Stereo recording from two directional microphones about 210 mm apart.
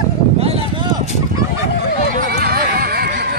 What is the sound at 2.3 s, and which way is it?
Neigh, 50° right (ahead or behind).